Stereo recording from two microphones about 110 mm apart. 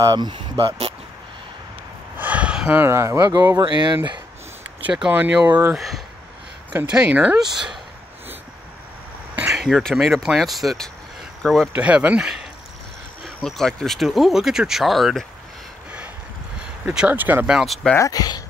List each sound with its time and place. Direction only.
0.0 s speech: 40° right (ahead or behind)
0.6 s speech: 60° right (ahead or behind)
2.1 s a sound: 15° right (ahead or behind)
2.8 s speech: 25° right (ahead or behind); by 4.2 s 45° right (ahead or behind)
4.8 s speech: 10° right (ahead or behind)
5.8 s a sound: centre (ahead or behind)
6.7 s speech: 15° right (ahead or behind)
9.5 s speech: 5° right (ahead or behind)
11.7 s speech: 10° right (ahead or behind)
13.4 s speech: 5° left (ahead or behind)
16.9 s speech: 15° right (ahead or behind)
17.5 s speech: 5° right (ahead or behind)
17.9 s speech: 30° left (ahead or behind)